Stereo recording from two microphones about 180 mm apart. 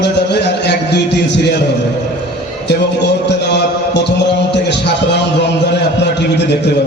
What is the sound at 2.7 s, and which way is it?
A man's voice, 70° left (ahead or behind).